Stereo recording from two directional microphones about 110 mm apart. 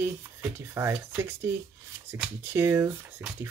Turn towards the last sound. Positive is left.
turn(degrees=-20)  # may be behind; listen again after turning